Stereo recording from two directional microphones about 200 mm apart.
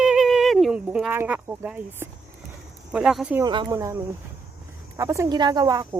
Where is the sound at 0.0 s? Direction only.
Centre (ahead or behind).